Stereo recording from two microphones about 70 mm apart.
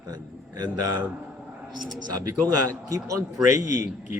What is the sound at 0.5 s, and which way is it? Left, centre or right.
A man's voice, right.